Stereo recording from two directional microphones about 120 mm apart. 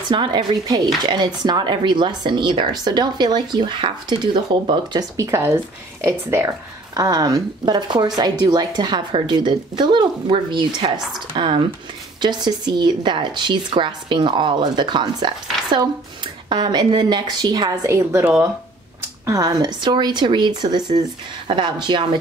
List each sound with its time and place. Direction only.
0.1 s speech: 45° right (ahead or behind); by 6.5 s 20° right (ahead or behind)
7.0 s speech: 30° right (ahead or behind)
16.4 s speech: 40° right (ahead or behind)
18.2 s speech: 10° right (ahead or behind)
19.2 s speech: 30° right (ahead or behind)